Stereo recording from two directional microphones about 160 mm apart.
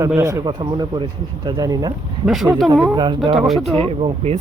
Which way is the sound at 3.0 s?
30° right (ahead or behind).